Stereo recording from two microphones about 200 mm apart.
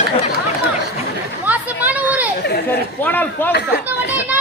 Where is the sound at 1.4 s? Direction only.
10° right (ahead or behind).